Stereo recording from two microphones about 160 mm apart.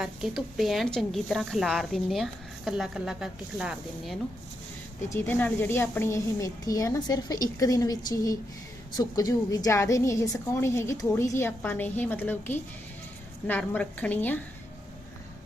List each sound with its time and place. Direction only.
0.0 s a woman's voice: centre (ahead or behind)
5.0 s a woman's voice: 15° left (ahead or behind)